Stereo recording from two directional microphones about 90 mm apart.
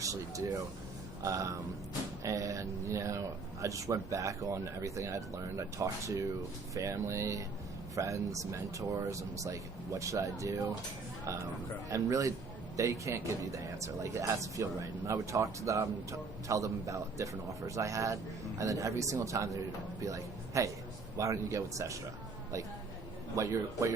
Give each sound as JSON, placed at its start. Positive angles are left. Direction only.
{"t": 0.0, "sound": "a man's voice", "side_deg": -40}
{"t": 23.3, "sound": "speech", "side_deg": -35}